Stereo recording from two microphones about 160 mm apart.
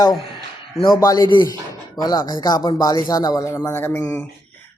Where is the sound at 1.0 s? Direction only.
20° left (ahead or behind).